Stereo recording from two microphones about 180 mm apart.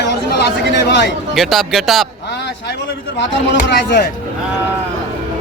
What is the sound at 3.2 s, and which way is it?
Speech, 75° left (ahead or behind).